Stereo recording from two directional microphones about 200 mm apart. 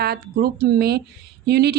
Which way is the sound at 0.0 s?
50° right (ahead or behind).